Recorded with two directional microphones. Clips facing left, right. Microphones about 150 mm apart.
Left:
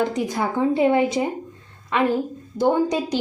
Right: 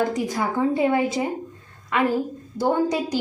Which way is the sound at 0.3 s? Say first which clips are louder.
Left 2 dB; 25° left (ahead or behind).